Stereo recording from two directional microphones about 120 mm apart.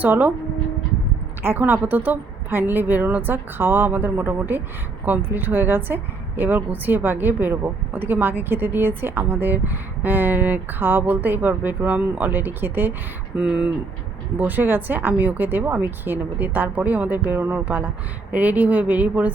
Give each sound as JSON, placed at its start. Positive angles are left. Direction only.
{"t": 0.0, "sound": "a woman's voice", "side_deg": -15}
{"t": 1.4, "sound": "a woman's voice", "side_deg": -15}